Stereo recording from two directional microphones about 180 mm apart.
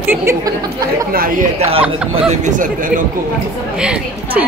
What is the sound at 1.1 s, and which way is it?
Speech, 50° right (ahead or behind).